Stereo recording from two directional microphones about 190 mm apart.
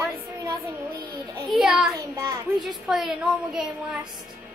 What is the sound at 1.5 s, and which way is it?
Speech, 5° right (ahead or behind).